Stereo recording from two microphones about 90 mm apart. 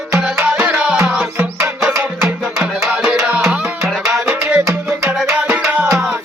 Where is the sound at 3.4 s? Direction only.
10° right (ahead or behind).